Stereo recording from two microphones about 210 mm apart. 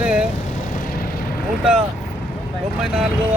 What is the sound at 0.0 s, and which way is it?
Vehicle, 5° right (ahead or behind).